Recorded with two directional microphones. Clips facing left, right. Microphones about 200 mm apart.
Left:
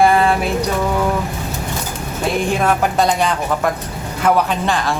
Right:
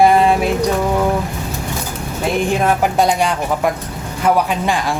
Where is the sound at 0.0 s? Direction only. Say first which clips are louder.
Right 2 dB; 20° right (ahead or behind).